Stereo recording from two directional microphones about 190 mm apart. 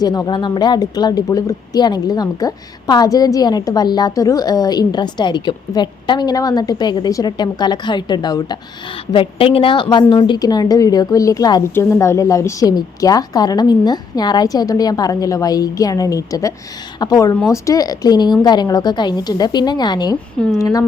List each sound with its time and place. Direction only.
0.0 s a woman's voice: 20° left (ahead or behind)